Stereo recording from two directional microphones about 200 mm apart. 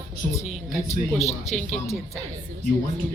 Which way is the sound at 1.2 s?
35° left (ahead or behind).